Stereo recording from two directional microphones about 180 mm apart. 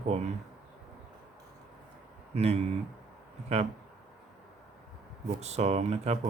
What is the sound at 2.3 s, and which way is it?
Speech, 35° right (ahead or behind).